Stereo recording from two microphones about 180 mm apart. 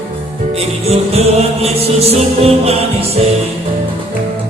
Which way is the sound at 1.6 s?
35° right (ahead or behind).